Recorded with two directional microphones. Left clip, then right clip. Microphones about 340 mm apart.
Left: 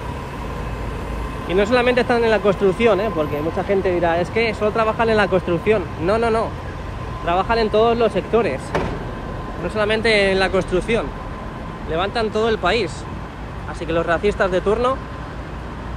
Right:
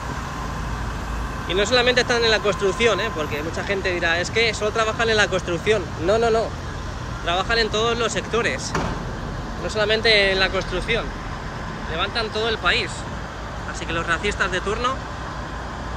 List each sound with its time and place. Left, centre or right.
1.5 s speech: centre
7.2 s speech: centre
9.8 s speech: centre